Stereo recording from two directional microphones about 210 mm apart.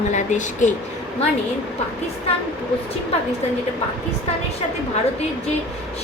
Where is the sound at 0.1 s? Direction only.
35° left (ahead or behind).